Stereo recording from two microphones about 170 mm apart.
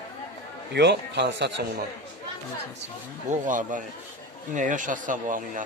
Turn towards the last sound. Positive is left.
turn(degrees=-50)  # may be behind; listen again after turning